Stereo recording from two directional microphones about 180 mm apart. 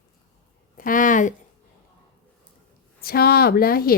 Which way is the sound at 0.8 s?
50° left (ahead or behind).